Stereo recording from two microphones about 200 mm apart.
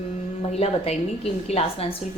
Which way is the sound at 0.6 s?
30° left (ahead or behind).